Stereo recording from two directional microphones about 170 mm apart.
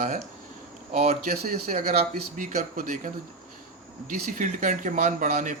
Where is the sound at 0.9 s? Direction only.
45° right (ahead or behind).